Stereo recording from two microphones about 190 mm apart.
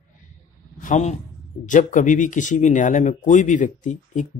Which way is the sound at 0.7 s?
40° left (ahead or behind).